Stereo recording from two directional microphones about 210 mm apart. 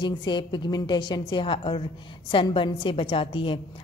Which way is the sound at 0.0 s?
20° left (ahead or behind).